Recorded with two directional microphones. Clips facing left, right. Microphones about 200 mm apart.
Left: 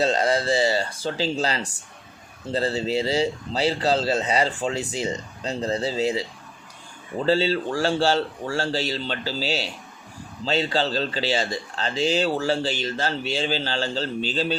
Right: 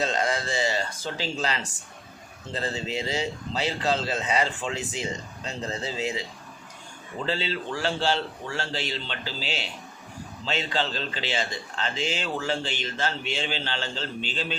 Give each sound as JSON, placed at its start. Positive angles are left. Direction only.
{"t": 0.0, "sound": "speech", "side_deg": 35}
{"t": 7.3, "sound": "speech", "side_deg": 40}